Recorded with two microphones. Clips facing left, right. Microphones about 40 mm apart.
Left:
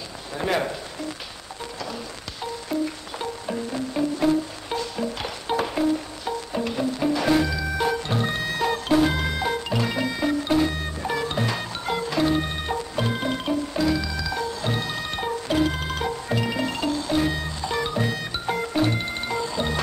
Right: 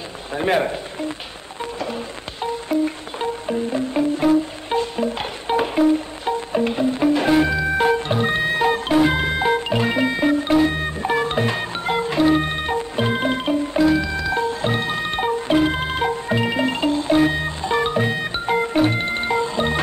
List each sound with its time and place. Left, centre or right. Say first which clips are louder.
0.4 s speech: right 5 dB; right
1.6 s music: right 7 dB; right